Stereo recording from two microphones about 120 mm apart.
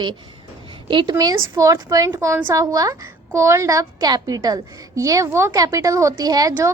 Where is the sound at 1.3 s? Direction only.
25° right (ahead or behind).